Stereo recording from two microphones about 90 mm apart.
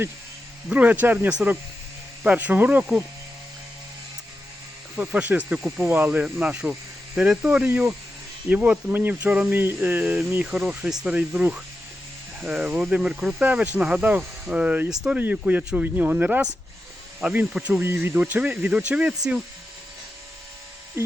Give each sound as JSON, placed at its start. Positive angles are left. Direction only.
{"t": 0.7, "sound": "speech", "side_deg": -15}
{"t": 4.9, "sound": "speech", "side_deg": -15}